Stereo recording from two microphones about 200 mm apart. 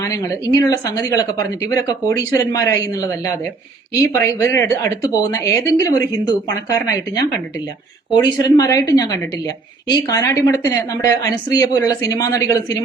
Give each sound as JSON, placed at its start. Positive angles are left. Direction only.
{"t": 0.0, "sound": "speech", "side_deg": 20}
{"t": 8.1, "sound": "speech", "side_deg": 20}